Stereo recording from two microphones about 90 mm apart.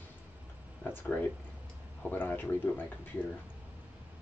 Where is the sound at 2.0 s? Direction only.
20° left (ahead or behind).